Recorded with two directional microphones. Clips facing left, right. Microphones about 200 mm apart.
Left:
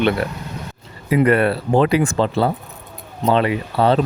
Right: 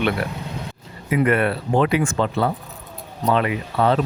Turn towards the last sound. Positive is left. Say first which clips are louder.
# left 3 dB
turn(degrees=30)  # may be behind; listen again after turning